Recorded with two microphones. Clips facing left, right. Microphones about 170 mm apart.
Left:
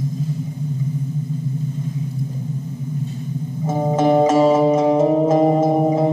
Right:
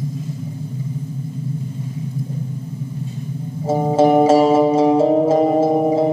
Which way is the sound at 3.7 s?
30° right (ahead or behind).